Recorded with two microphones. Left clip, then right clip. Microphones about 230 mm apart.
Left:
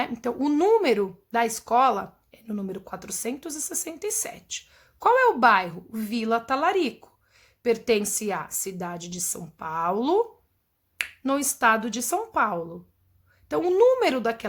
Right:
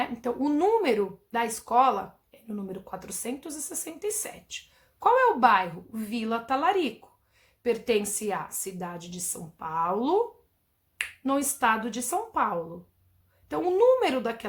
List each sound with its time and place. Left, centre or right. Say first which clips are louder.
0.0 s speech: left 2 dB; left